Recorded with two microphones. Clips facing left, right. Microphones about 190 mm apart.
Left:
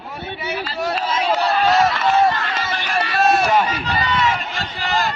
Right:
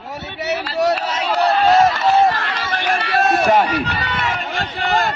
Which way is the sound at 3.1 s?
55° right (ahead or behind).